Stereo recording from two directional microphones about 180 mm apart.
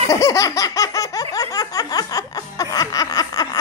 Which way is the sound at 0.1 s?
15° left (ahead or behind).